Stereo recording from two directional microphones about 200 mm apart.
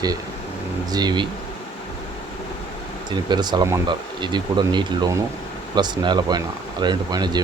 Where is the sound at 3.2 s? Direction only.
20° right (ahead or behind).